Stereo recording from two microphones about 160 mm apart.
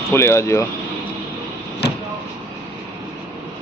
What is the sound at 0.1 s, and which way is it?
Speech, 15° left (ahead or behind).